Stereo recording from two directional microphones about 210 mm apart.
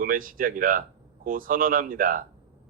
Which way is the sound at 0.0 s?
40° right (ahead or behind).